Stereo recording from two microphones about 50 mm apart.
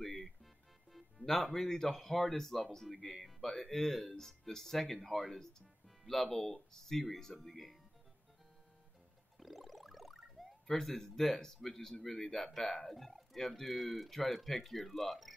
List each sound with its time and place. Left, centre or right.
0.0 s music: centre
0.9 s speech: centre
9.4 s a sound: centre
12.0 s speech: centre